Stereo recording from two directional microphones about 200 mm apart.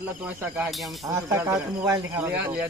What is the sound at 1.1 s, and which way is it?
Speech, 15° right (ahead or behind).